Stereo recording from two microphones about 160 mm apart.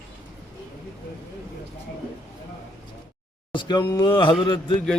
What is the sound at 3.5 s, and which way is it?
A man's voice, 30° left (ahead or behind).